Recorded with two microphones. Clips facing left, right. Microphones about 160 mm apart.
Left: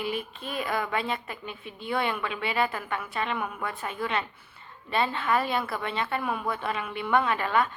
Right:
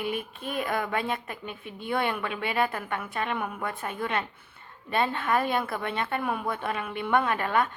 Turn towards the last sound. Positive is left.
turn(degrees=-50)  # may be behind; listen again after turning